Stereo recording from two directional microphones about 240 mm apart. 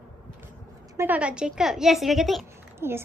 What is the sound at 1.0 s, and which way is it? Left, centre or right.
A woman's voice, centre.